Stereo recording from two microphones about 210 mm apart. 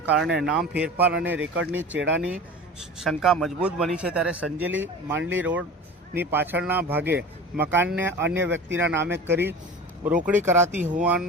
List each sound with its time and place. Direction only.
0.0 s a man's voice: 5° right (ahead or behind)
1.9 s speech: 60° right (ahead or behind)
3.0 s a man's voice: centre (ahead or behind)
10.7 s speech: 35° right (ahead or behind)
11.0 s speech: 5° right (ahead or behind)